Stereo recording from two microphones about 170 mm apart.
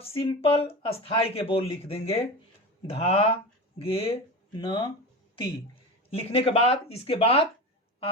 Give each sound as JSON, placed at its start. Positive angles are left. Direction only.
{"t": 0.0, "sound": "speech", "side_deg": 35}
{"t": 6.1, "sound": "speech", "side_deg": 35}